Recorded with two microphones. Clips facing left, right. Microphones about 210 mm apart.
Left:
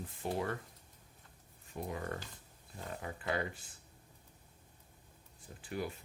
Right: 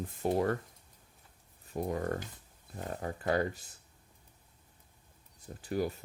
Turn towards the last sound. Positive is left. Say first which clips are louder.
# right 7 dB
turn(degrees=-40)  # may be behind; listen again after turning